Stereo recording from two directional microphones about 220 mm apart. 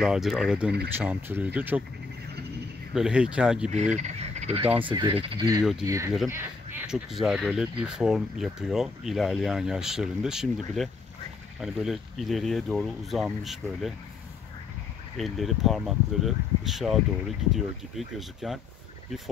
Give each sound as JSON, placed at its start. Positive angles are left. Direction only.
{"t": 0.0, "sound": "speech", "side_deg": 0}
{"t": 2.9, "sound": "speech", "side_deg": -5}
{"t": 3.7, "sound": "speech", "side_deg": -30}
{"t": 6.9, "sound": "speech", "side_deg": 0}
{"t": 15.1, "sound": "speech", "side_deg": 0}